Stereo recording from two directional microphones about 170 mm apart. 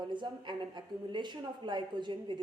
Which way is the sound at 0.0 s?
25° right (ahead or behind).